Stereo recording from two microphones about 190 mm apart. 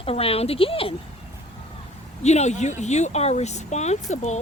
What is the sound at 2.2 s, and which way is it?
Speech, 35° left (ahead or behind).